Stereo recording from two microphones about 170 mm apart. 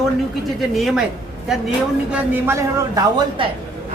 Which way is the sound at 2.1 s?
10° right (ahead or behind).